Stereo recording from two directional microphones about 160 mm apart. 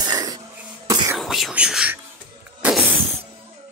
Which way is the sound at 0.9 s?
20° right (ahead or behind).